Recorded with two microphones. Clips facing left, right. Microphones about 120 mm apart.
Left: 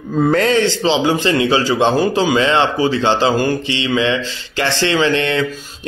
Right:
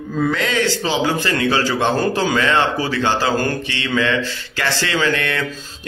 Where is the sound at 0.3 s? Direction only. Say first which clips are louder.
Left 8 dB; 35° left (ahead or behind).